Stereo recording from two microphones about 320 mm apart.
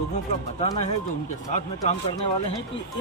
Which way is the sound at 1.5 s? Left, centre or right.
Left.